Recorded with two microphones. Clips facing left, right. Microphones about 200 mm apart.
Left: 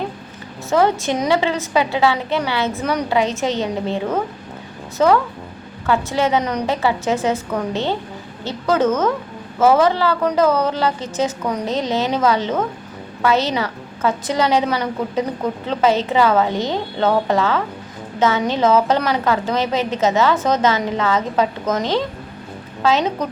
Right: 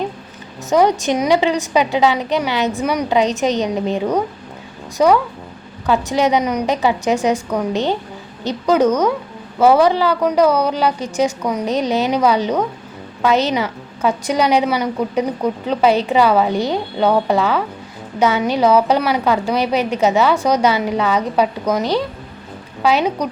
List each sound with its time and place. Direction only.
0.7 s a woman's voice: 15° right (ahead or behind)